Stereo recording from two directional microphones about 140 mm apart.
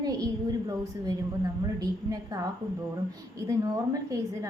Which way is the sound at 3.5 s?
25° right (ahead or behind).